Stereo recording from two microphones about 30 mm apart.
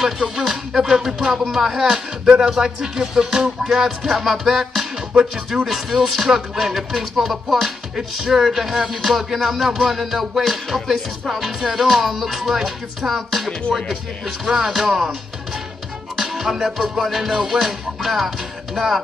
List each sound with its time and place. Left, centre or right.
0.5 s music: centre
2.5 s music: centre
3.6 s music: centre
16.2 s music: centre